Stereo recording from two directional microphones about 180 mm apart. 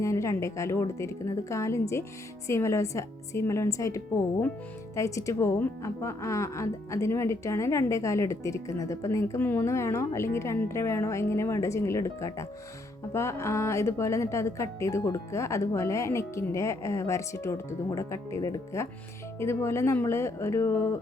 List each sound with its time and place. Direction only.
0.0 s speech: 15° left (ahead or behind)